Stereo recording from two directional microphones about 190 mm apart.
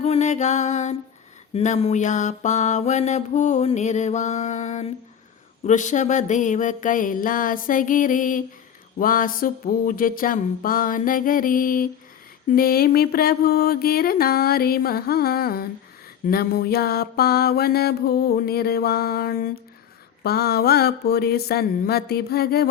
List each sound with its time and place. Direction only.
0.0 s music: 35° left (ahead or behind)
1.5 s mantra: 35° left (ahead or behind); by 22.7 s 55° left (ahead or behind)